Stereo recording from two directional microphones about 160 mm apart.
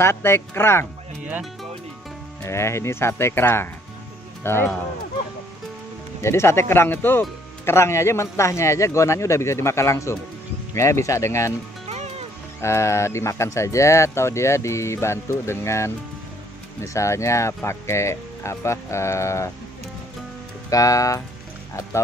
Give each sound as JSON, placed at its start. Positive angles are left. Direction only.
{"t": 0.0, "sound": "a man's voice", "side_deg": 15}
{"t": 1.2, "sound": "speech", "side_deg": -5}
{"t": 2.4, "sound": "a man's voice", "side_deg": 15}
{"t": 6.2, "sound": "a man's voice", "side_deg": 15}
{"t": 11.9, "sound": "music", "side_deg": -45}
{"t": 12.6, "sound": "a man's voice", "side_deg": 15}
{"t": 20.7, "sound": "speech", "side_deg": 20}